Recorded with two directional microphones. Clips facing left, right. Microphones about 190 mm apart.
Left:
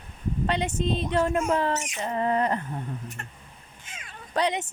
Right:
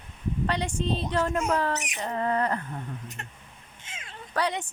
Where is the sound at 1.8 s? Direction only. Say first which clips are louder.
Left 2 dB; 15° right (ahead or behind).